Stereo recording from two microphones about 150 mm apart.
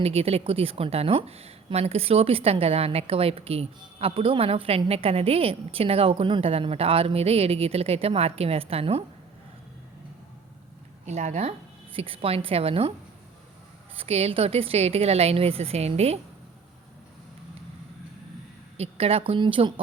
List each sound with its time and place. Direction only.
0.0 s a woman's voice: 40° right (ahead or behind)
11.0 s a woman's voice: 50° right (ahead or behind)
13.9 s a woman's voice: 40° right (ahead or behind)
18.8 s a woman's voice: 40° right (ahead or behind)